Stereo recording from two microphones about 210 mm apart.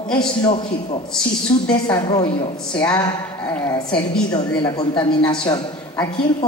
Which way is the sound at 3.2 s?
5° left (ahead or behind).